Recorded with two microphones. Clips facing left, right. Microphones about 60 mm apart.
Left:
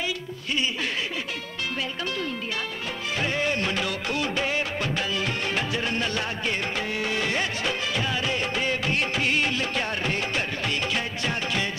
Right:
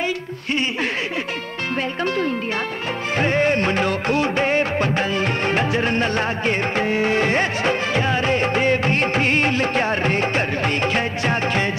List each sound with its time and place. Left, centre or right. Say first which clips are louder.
3.2 s music of bollywood: right 8 dB; right